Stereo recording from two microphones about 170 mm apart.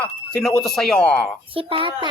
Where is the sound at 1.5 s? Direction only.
30° right (ahead or behind).